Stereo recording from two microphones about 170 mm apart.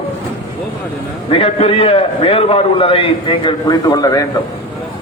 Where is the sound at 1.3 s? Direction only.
35° left (ahead or behind).